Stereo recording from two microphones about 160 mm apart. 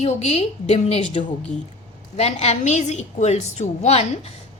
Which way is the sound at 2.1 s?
40° left (ahead or behind).